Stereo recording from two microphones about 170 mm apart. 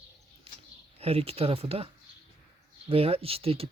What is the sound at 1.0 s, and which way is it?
Speech, 35° right (ahead or behind).